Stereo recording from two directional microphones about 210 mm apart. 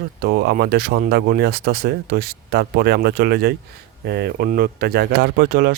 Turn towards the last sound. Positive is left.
turn(degrees=-45)  # may be behind; listen again after turning